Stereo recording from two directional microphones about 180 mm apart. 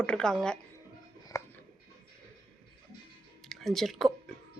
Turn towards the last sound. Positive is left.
turn(degrees=0)  # may be behind; listen again after turning